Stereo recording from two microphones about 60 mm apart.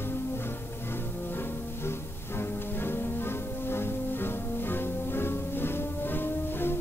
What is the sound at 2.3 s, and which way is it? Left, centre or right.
Music, left.